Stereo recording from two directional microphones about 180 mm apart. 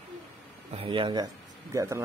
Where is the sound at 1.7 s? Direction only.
15° right (ahead or behind).